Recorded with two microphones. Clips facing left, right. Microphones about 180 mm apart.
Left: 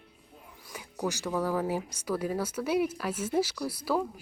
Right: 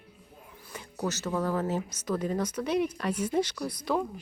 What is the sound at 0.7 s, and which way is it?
Speech, 10° left (ahead or behind).